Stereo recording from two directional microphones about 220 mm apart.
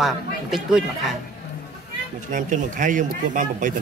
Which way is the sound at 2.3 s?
35° right (ahead or behind).